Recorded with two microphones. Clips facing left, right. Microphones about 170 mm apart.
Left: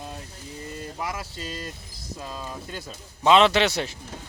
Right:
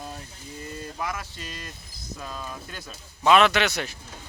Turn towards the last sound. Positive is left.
turn(degrees=30)  # may be behind; listen again after turning